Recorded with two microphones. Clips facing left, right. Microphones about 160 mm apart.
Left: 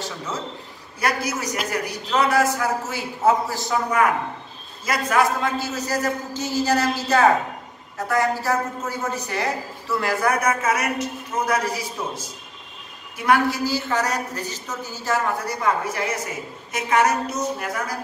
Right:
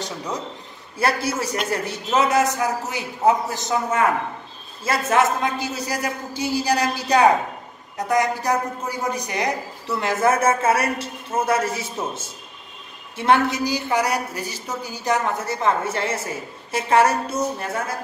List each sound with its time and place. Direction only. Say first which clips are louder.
0.0 s a woman's voice: right 2 dB; 15° right (ahead or behind)
0.9 s a woman's voice: right 2 dB; 30° right (ahead or behind)